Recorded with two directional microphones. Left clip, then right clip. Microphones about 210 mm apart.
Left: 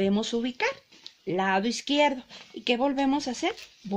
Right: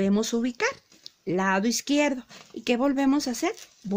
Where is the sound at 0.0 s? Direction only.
55° right (ahead or behind).